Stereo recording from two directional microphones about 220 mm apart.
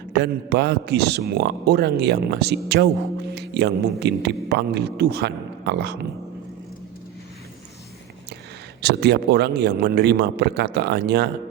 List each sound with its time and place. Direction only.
0.1 s a man's voice: 50° right (ahead or behind)
8.8 s a man's voice: 50° right (ahead or behind)